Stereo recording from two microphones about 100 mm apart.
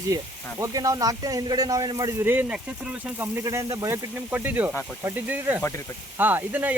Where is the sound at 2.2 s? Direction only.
20° right (ahead or behind).